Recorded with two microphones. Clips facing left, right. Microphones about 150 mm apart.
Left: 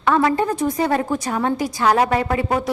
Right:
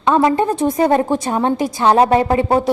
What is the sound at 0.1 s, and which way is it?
A woman's voice, 20° right (ahead or behind).